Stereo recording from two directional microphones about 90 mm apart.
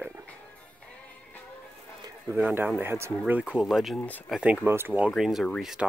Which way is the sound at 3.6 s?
Centre (ahead or behind).